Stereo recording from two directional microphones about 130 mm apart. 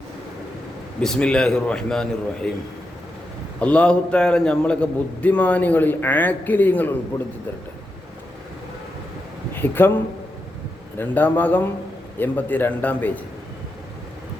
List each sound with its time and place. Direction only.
1.0 s a man's voice: 5° left (ahead or behind)
3.6 s a man's voice: 10° left (ahead or behind)
9.5 s speech: 15° left (ahead or behind)
10.9 s a man's voice: 15° left (ahead or behind)